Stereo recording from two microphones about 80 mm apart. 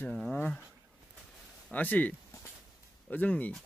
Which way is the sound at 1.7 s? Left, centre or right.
Centre.